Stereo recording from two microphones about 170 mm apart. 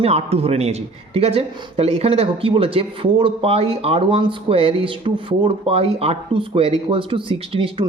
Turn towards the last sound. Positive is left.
turn(degrees=-30)  # may be behind; listen again after turning